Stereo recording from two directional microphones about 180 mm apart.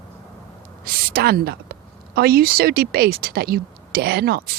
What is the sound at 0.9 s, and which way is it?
A woman's voice, 55° right (ahead or behind).